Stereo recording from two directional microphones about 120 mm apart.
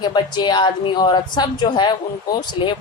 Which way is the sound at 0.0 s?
40° left (ahead or behind).